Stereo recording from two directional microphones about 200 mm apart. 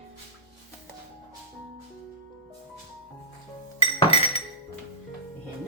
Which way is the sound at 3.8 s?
30° left (ahead or behind).